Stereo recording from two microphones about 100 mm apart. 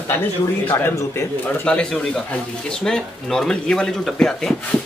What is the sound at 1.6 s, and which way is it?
Speech, 10° left (ahead or behind).